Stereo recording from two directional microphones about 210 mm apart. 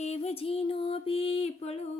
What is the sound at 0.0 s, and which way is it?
Music, 30° left (ahead or behind).